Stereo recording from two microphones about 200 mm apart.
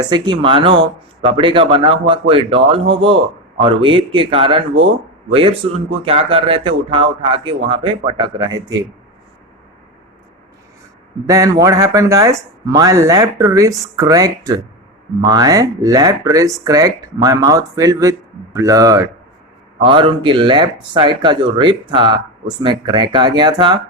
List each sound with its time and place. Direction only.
0.0 s speech: 20° right (ahead or behind)
11.3 s speech: 15° right (ahead or behind)